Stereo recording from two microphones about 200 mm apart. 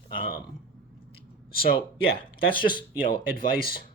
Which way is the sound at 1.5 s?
50° left (ahead or behind).